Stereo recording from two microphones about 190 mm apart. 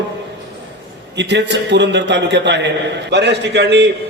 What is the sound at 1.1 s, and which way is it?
A man's voice, 65° right (ahead or behind).